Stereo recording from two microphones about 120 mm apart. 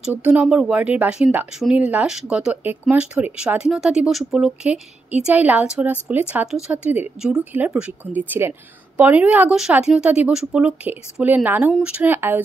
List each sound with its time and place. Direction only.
0.1 s speech: 15° right (ahead or behind)